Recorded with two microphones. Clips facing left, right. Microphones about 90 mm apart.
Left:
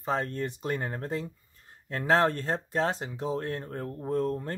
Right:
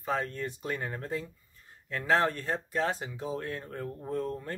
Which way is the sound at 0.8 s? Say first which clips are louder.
Left 2 dB; 35° left (ahead or behind).